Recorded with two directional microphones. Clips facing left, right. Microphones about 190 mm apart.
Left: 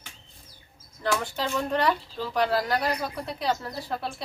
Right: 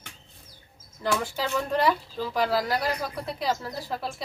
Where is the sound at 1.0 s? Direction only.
5° right (ahead or behind).